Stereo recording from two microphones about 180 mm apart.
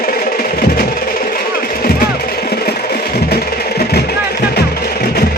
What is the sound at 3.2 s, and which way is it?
Music, 60° left (ahead or behind).